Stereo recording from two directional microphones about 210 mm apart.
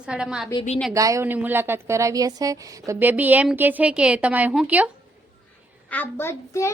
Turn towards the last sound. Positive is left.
turn(degrees=10)  # may be behind; listen again after turning